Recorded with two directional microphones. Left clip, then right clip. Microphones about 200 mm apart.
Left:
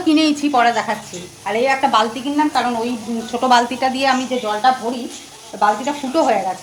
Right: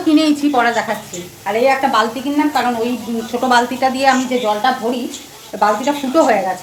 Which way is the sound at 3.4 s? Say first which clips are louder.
Right 1 dB; 25° left (ahead or behind).